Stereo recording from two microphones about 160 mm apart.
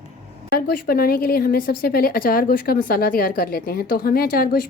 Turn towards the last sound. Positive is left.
turn(degrees=65)  # may be behind; listen again after turning